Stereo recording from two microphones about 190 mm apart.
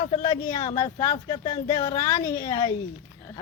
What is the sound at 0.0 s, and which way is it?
Speech, 30° left (ahead or behind).